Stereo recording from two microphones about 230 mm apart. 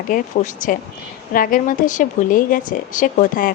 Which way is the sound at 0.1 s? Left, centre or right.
Left.